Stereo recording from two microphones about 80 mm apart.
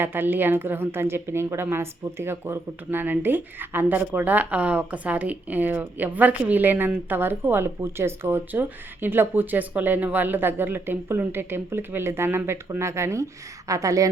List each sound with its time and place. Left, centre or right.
0.0 s a woman's voice: right